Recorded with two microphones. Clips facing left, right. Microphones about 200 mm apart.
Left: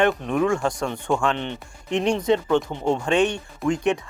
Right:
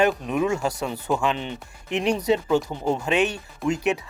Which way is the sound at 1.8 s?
30° left (ahead or behind).